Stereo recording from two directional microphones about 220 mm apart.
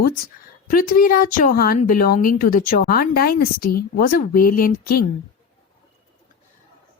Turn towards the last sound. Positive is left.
turn(degrees=40)  # may be behind; listen again after turning